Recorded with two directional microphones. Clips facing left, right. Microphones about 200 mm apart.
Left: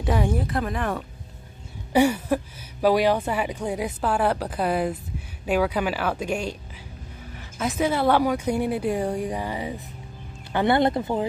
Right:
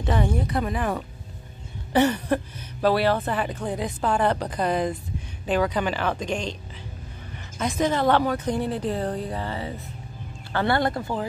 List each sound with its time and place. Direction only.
0.0 s speech: 5° left (ahead or behind)
1.9 s speech: 10° left (ahead or behind)
7.5 s speech: 5° left (ahead or behind); by 11.2 s 20° left (ahead or behind)